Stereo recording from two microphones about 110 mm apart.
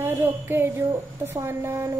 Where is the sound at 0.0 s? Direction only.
20° right (ahead or behind).